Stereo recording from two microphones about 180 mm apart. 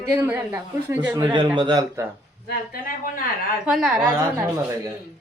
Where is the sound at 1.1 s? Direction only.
25° right (ahead or behind).